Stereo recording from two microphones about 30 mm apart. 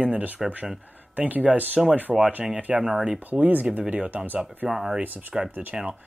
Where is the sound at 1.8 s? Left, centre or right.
Centre.